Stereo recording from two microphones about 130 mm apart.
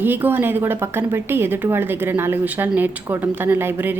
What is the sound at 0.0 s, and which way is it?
A woman's voice, 15° right (ahead or behind).